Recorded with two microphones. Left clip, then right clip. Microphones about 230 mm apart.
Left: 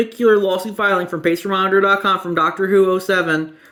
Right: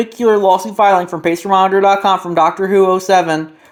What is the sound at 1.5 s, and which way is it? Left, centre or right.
Speech, centre.